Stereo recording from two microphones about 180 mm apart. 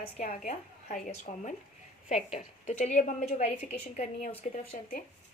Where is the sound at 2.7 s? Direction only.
40° left (ahead or behind).